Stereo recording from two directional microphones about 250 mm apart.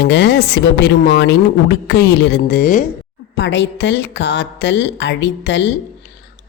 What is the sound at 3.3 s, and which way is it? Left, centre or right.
Speech, left.